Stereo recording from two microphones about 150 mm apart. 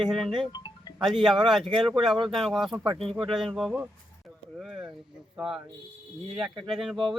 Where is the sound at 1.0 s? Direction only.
Centre (ahead or behind).